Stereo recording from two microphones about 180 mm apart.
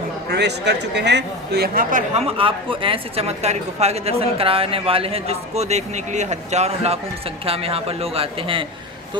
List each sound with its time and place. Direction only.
0.3 s speech: 65° right (ahead or behind); by 8.6 s 30° right (ahead or behind)